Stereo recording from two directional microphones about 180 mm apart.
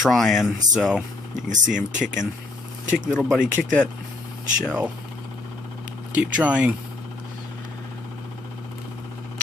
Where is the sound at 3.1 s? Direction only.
Centre (ahead or behind).